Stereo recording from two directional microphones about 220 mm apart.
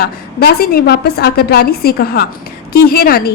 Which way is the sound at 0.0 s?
45° left (ahead or behind).